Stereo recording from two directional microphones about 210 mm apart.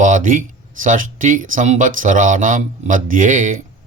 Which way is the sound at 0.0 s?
40° right (ahead or behind).